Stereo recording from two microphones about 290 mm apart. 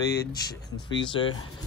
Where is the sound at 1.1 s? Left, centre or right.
Centre.